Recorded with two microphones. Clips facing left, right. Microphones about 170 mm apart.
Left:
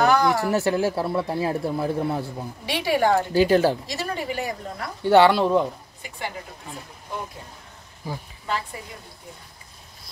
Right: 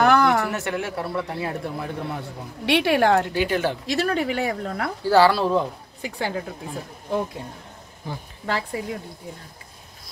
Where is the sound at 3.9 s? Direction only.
65° right (ahead or behind).